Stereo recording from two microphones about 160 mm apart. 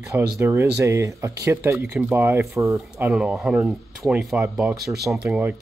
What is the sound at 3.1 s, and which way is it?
Speech, 5° right (ahead or behind).